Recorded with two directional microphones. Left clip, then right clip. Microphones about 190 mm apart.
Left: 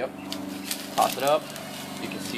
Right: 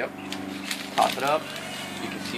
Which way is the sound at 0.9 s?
25° left (ahead or behind).